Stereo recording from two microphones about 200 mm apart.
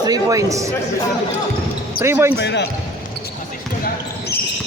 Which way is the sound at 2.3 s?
60° left (ahead or behind).